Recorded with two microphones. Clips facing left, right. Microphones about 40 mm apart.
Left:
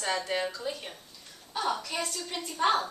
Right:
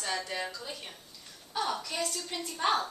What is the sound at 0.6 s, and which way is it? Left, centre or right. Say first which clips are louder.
A woman's voice: left 6 dB; centre.